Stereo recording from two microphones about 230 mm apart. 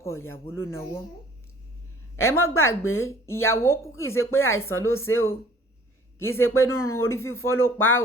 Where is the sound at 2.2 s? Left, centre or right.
Left.